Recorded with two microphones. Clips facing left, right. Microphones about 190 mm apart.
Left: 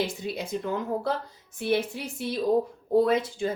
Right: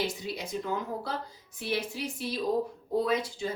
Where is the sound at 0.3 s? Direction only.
55° left (ahead or behind).